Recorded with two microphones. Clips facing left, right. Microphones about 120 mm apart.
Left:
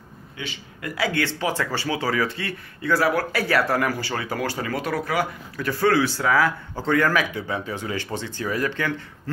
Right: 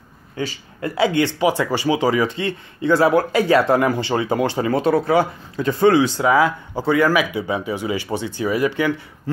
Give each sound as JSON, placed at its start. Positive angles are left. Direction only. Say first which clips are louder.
{"t": 0.4, "sound": "speech", "louder": "right 9 dB", "side_deg": -35}